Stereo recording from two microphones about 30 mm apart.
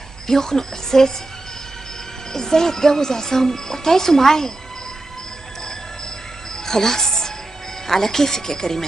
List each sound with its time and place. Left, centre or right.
0.3 s speech: centre
2.3 s speech: centre
6.5 s music: centre
7.8 s speech: centre